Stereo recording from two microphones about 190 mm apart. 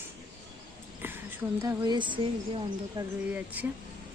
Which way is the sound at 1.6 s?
20° right (ahead or behind).